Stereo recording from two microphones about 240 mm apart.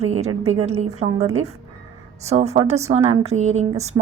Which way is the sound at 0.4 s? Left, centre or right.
Right.